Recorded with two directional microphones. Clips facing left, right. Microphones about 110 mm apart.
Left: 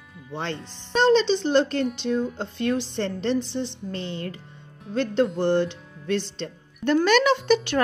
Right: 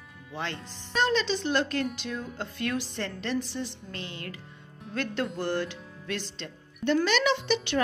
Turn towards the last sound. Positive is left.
turn(degrees=45)  # may be behind; listen again after turning